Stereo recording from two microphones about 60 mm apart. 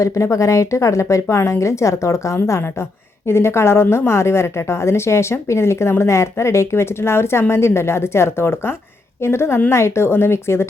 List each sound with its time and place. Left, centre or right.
0.0 s a woman's voice: left